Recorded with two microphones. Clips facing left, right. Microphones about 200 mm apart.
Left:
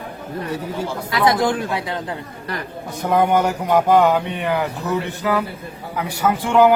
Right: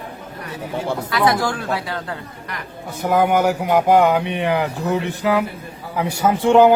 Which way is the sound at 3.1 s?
10° right (ahead or behind).